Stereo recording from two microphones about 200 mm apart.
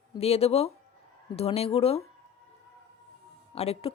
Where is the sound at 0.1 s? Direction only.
30° left (ahead or behind).